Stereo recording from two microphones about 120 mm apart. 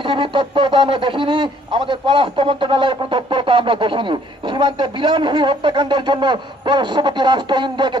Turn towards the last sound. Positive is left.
turn(degrees=-40)  # may be behind; listen again after turning